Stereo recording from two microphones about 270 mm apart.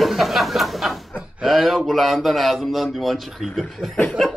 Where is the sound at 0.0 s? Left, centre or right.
Centre.